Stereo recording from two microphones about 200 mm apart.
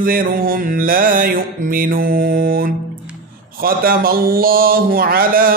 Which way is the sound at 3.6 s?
45° right (ahead or behind).